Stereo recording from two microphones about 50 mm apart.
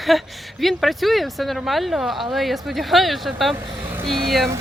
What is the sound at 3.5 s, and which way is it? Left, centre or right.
Speech, right.